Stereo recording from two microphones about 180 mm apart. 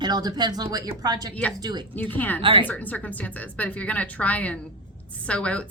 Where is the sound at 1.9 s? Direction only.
10° left (ahead or behind).